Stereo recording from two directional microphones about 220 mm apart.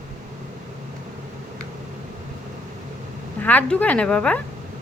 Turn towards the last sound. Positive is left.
turn(degrees=5)  # may be behind; listen again after turning